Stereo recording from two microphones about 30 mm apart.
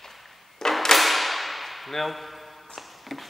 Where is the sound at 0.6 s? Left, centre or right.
Centre.